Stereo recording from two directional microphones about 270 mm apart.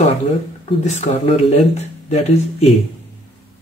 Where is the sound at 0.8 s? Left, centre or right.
Left.